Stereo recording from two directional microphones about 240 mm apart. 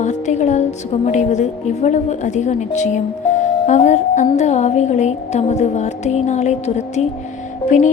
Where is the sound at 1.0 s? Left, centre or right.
Left.